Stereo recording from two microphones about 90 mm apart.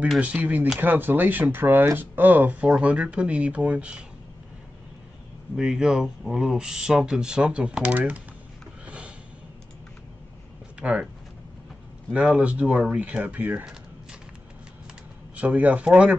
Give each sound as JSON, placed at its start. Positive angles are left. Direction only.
{"t": 0.2, "sound": "speech", "side_deg": -15}
{"t": 5.6, "sound": "speech", "side_deg": -5}
{"t": 8.8, "sound": "music", "side_deg": -15}
{"t": 10.8, "sound": "speech", "side_deg": -15}
{"t": 12.1, "sound": "speech", "side_deg": -10}
{"t": 15.3, "sound": "speech", "side_deg": -15}